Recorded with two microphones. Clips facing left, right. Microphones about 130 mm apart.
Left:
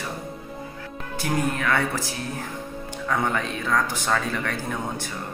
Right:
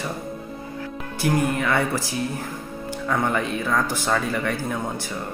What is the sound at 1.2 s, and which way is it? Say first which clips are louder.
Speech: right 3 dB; 15° right (ahead or behind).